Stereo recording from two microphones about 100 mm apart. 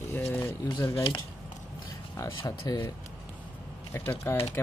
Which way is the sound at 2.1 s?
30° left (ahead or behind).